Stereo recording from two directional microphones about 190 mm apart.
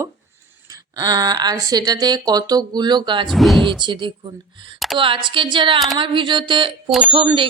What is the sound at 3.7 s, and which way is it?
A woman's voice, 25° right (ahead or behind).